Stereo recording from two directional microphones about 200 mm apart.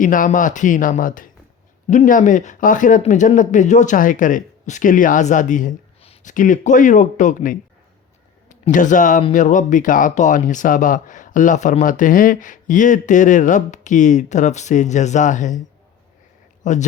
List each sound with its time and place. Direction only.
0.0 s speech: 40° left (ahead or behind)
16.6 s speech: 40° left (ahead or behind)